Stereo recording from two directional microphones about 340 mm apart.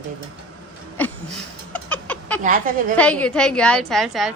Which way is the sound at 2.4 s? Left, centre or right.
Right.